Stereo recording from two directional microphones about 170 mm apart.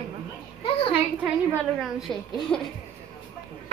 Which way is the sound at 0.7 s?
35° left (ahead or behind).